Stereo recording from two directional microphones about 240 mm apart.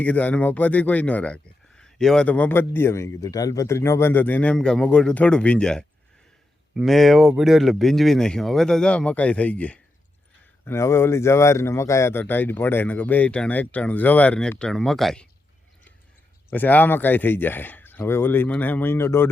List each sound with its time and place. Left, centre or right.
0.0 s speech: centre
16.5 s speech: centre